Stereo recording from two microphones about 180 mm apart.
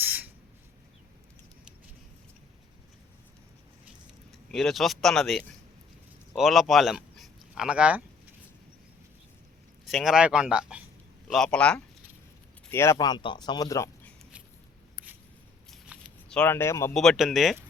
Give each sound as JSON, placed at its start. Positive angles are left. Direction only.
{"t": 0.0, "sound": "owl", "side_deg": -10}
{"t": 4.3, "sound": "speech", "side_deg": 0}
{"t": 9.8, "sound": "speech", "side_deg": 0}
{"t": 15.7, "sound": "a sound", "side_deg": 5}
{"t": 16.9, "sound": "speech", "side_deg": 0}